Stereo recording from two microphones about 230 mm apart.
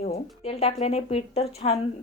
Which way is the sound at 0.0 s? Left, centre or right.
Left.